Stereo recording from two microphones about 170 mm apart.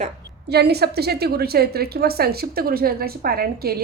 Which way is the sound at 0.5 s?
70° right (ahead or behind).